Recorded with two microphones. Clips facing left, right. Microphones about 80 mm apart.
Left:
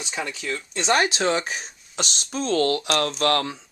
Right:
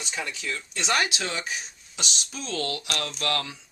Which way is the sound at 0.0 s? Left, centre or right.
Centre.